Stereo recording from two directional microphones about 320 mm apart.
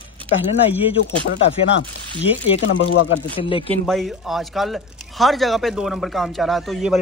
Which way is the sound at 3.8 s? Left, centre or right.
Centre.